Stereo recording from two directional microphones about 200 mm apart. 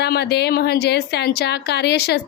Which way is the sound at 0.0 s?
55° left (ahead or behind).